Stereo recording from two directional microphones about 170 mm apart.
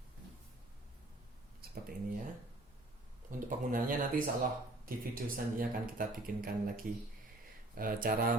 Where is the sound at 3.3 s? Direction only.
55° right (ahead or behind).